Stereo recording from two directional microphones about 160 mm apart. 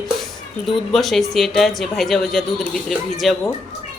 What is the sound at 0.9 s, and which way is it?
Speech, centre (ahead or behind).